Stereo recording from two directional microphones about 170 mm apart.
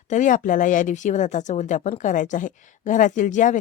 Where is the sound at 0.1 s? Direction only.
50° left (ahead or behind).